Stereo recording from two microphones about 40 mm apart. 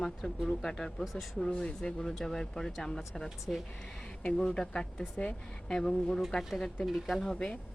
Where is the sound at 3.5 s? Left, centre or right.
Centre.